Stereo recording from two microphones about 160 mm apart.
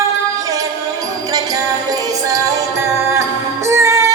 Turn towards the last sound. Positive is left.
turn(degrees=-15)  # may be behind; listen again after turning